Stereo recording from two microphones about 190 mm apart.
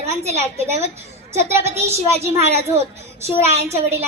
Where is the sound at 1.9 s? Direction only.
35° right (ahead or behind).